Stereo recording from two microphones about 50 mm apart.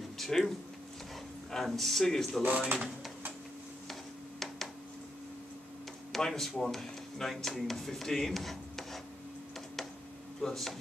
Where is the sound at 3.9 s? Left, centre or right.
Centre.